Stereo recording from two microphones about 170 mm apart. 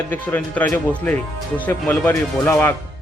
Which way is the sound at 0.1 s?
10° left (ahead or behind).